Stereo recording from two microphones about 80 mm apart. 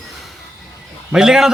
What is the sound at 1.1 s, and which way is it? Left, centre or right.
Speech, centre.